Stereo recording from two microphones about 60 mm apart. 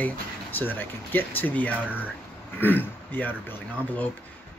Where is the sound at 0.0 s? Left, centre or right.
Left.